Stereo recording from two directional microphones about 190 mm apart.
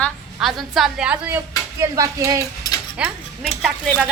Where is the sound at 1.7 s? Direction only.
15° right (ahead or behind).